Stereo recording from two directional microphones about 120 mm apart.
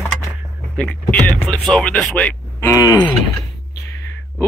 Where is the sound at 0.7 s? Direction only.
10° left (ahead or behind).